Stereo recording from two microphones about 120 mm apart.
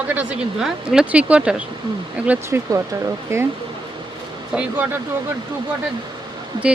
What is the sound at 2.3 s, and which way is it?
Speech, 20° right (ahead or behind).